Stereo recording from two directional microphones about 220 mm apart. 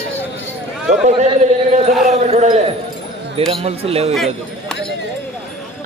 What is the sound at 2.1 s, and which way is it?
Speech, 30° right (ahead or behind).